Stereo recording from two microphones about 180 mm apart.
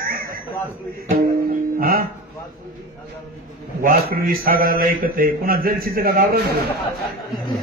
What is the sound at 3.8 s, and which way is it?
A man's voice, 50° right (ahead or behind).